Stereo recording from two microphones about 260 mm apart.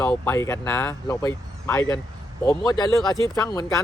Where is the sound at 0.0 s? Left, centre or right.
Centre.